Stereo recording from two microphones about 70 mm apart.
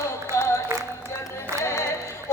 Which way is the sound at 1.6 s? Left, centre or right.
Left.